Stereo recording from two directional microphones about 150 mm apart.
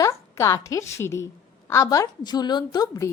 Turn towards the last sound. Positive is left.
turn(degrees=25)  # may be behind; listen again after turning